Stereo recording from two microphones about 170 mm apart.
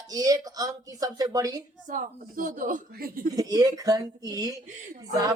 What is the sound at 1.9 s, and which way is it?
Speech, 50° right (ahead or behind).